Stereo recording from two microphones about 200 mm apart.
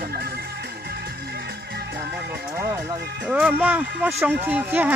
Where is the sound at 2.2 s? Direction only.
55° right (ahead or behind).